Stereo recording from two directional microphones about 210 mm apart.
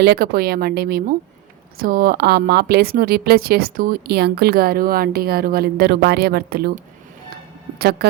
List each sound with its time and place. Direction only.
0.0 s a woman's voice: 50° right (ahead or behind)